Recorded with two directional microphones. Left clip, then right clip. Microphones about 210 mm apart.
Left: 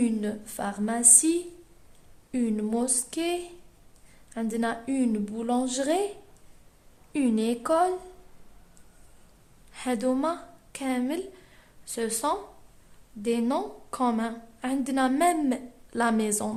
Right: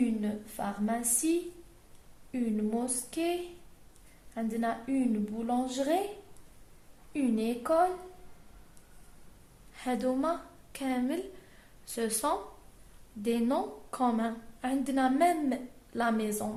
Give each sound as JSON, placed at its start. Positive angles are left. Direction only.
{"t": 0.0, "sound": "a woman's voice", "side_deg": 45}
{"t": 4.4, "sound": "a woman's voice", "side_deg": 40}
{"t": 7.1, "sound": "a woman's voice", "side_deg": 40}
{"t": 9.7, "sound": "a woman's voice", "side_deg": 30}